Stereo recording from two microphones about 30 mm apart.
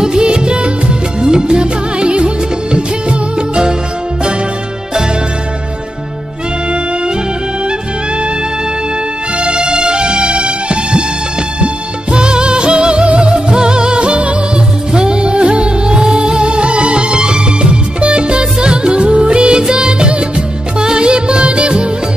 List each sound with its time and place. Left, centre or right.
0.0 s music: right
9.4 s music: right
14.9 s music: right